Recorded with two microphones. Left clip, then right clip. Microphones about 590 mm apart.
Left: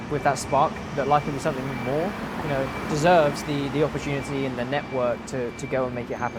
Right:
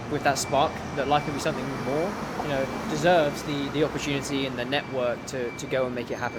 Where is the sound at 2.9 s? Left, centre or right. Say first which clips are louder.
Left 3 dB; left.